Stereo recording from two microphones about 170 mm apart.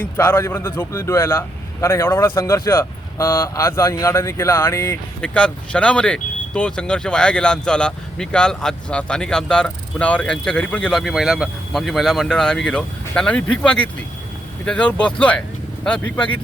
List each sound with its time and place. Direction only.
0.2 s speech: 15° left (ahead or behind)